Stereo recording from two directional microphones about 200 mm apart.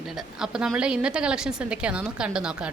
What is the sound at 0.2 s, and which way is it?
A woman's voice, 5° right (ahead or behind).